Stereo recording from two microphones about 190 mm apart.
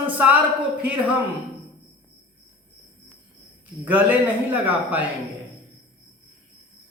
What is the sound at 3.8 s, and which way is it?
Speech, 10° right (ahead or behind).